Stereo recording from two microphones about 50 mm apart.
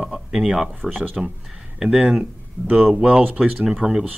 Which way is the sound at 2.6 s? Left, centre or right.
Right.